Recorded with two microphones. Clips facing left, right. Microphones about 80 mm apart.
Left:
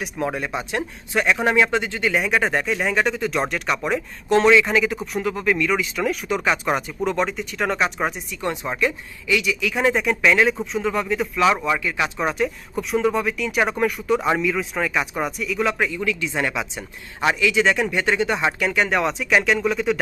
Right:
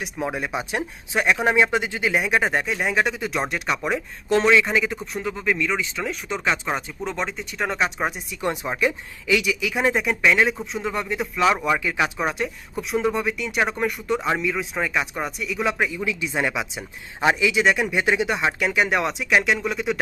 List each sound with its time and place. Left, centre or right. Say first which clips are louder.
0.0 s speech: left 2 dB; centre
2.1 s speech: even; centre
9.4 s speech: left 1 dB; centre
9.7 s speech: left 2 dB; centre
11.6 s speech: even; centre
12.2 s speech: left 3 dB; centre
16.0 s speech: left 1 dB; centre
17.6 s speech: left 1 dB; centre